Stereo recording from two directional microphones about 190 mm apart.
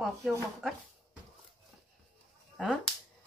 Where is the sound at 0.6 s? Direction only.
Centre (ahead or behind).